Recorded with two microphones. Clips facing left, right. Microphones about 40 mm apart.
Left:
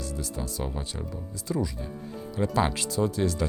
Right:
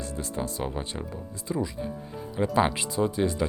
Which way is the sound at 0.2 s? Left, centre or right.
Right.